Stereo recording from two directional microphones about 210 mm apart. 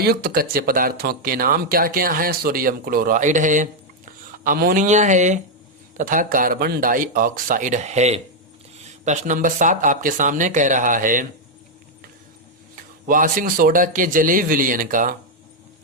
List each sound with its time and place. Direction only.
0.0 s speech: 50° right (ahead or behind)
13.1 s speech: 40° right (ahead or behind)